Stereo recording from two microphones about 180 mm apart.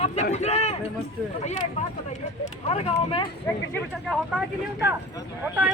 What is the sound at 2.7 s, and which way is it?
Speech, 30° left (ahead or behind).